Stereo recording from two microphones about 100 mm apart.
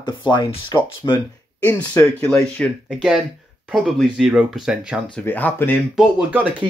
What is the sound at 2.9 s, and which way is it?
Speech, 5° right (ahead or behind).